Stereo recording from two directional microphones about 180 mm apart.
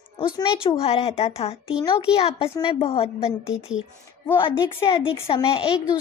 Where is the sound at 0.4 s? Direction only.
30° left (ahead or behind).